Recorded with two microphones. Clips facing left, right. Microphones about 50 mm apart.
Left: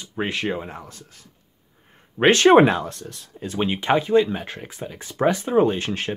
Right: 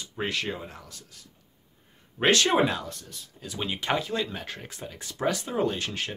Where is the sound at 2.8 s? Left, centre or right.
Left.